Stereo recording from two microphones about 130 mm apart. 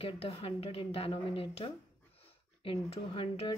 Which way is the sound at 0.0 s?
50° left (ahead or behind).